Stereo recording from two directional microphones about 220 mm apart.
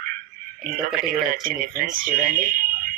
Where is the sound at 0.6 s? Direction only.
40° right (ahead or behind).